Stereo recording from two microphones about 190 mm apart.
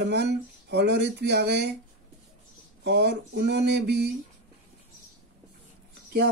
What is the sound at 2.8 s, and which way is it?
Speech, 65° right (ahead or behind).